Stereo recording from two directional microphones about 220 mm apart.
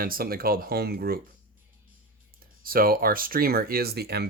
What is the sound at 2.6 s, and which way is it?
Speech, 40° right (ahead or behind).